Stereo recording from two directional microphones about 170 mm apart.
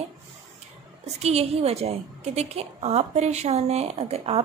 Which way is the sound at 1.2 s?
40° right (ahead or behind).